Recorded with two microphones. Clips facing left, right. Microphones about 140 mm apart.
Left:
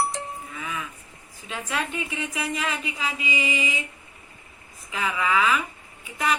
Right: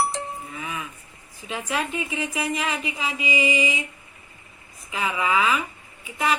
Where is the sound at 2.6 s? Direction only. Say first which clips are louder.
Right 2 dB; 10° right (ahead or behind).